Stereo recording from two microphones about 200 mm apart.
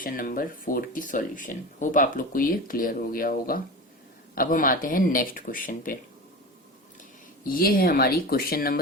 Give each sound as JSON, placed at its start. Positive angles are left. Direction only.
{"t": 0.0, "sound": "speech", "side_deg": 45}
{"t": 7.4, "sound": "speech", "side_deg": 45}